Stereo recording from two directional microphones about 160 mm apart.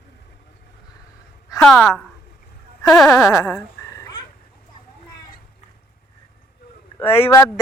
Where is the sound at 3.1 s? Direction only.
20° left (ahead or behind).